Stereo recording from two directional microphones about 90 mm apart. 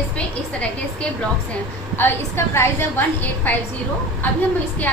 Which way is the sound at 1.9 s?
25° left (ahead or behind).